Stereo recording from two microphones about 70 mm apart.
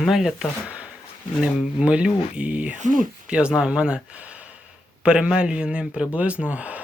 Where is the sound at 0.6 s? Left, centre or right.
Centre.